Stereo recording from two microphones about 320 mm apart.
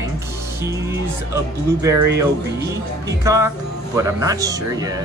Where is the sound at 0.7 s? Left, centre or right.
Centre.